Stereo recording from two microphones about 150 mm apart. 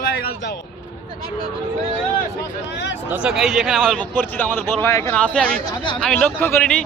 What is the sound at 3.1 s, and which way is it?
Speech, 5° right (ahead or behind).